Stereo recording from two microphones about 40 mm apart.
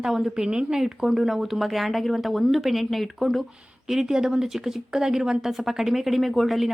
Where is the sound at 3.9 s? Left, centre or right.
Centre.